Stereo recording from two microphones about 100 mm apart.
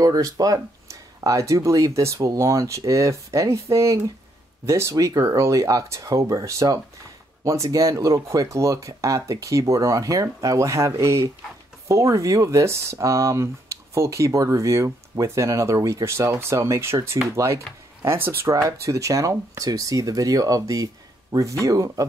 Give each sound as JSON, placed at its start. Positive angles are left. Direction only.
{"t": 0.0, "sound": "speech", "side_deg": -35}